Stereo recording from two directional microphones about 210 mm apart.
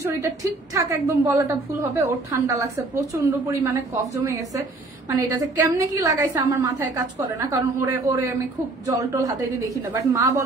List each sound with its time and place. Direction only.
0.0 s a woman's voice: 15° right (ahead or behind)